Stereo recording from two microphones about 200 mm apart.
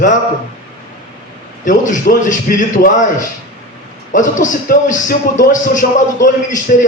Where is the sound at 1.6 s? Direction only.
40° left (ahead or behind).